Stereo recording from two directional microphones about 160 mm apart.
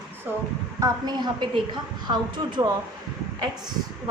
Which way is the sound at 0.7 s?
25° right (ahead or behind).